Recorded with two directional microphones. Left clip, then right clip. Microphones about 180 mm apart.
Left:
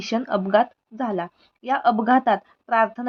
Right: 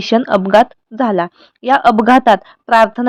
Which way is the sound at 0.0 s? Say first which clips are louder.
Right 11 dB; 45° right (ahead or behind).